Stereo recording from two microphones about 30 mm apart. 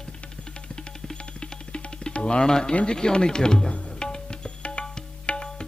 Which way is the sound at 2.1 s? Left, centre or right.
Left.